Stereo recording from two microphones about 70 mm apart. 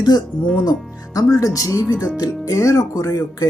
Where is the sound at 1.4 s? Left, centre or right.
Left.